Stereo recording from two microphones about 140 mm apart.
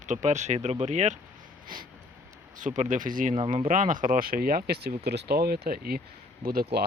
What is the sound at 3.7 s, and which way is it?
Speech, 65° right (ahead or behind).